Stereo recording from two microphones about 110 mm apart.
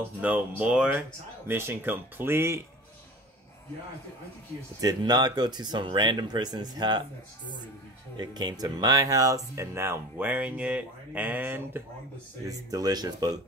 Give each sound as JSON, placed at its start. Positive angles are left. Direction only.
{"t": 0.2, "sound": "speech", "side_deg": -15}
{"t": 1.5, "sound": "speech", "side_deg": -20}
{"t": 4.7, "sound": "speech", "side_deg": -35}
{"t": 8.2, "sound": "speech", "side_deg": -40}
{"t": 12.4, "sound": "speech", "side_deg": -35}